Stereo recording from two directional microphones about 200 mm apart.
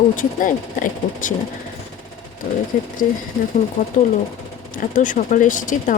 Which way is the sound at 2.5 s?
45° left (ahead or behind).